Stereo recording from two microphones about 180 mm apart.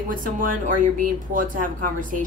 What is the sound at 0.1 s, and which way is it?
A woman's voice, 50° right (ahead or behind).